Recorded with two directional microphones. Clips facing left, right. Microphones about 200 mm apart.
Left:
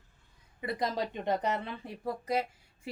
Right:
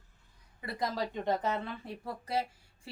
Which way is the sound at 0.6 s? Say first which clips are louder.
Left 2 dB; 20° left (ahead or behind).